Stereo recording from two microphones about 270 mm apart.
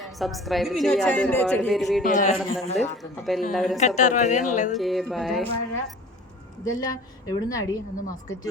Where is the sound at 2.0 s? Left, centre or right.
Left.